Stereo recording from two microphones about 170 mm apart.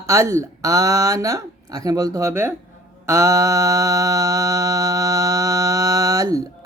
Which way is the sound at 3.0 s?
15° right (ahead or behind).